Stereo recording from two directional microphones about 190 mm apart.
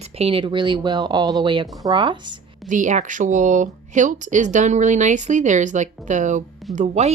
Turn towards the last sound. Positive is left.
turn(degrees=-40)  # may be behind; listen again after turning